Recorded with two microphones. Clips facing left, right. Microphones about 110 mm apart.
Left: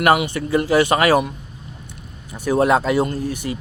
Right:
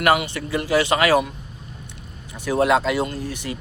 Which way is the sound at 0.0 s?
30° left (ahead or behind).